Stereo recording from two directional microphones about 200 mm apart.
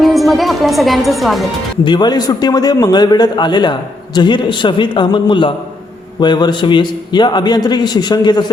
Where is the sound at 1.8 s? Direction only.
20° left (ahead or behind).